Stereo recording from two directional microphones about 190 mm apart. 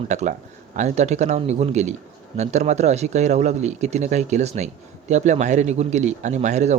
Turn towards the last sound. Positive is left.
turn(degrees=-35)  # may be behind; listen again after turning